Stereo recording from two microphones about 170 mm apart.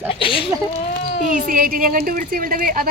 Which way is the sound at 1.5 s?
55° right (ahead or behind).